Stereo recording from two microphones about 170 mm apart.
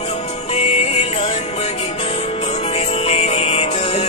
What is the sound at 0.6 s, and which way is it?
Music, 35° left (ahead or behind).